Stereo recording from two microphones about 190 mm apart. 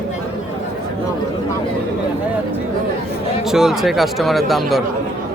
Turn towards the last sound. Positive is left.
turn(degrees=0)  # may be behind; listen again after turning